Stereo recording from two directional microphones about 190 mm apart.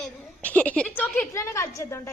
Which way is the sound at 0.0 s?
10° left (ahead or behind).